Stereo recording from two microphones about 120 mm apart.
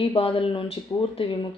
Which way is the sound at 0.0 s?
50° left (ahead or behind).